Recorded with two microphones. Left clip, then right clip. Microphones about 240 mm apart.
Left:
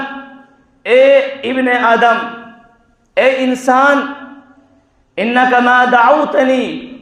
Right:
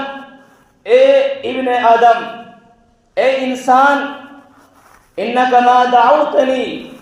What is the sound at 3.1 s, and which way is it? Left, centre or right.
Speech, left.